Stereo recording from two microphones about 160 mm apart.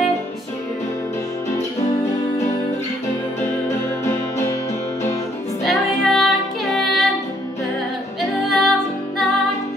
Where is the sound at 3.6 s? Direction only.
20° left (ahead or behind).